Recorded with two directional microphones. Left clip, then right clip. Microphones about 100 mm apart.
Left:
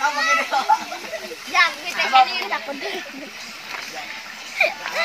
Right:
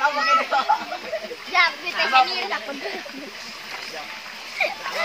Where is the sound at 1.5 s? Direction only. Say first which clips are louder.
Left 1 dB; 30° left (ahead or behind).